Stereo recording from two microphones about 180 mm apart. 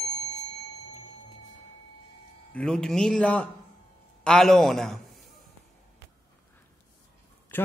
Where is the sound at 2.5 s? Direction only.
5° left (ahead or behind).